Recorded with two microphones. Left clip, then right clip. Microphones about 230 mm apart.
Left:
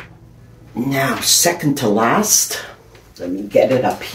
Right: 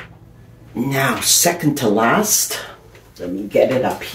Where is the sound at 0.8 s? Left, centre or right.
Right.